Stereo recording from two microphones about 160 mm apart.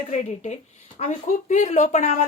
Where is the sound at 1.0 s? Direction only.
50° left (ahead or behind).